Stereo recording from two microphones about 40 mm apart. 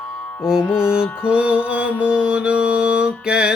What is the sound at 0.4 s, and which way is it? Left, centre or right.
Music, centre.